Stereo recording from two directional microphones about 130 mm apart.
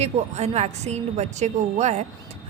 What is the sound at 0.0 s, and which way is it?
A woman's voice, 60° right (ahead or behind).